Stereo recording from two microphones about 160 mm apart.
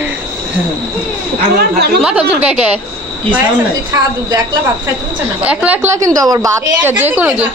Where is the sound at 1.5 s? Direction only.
90° right.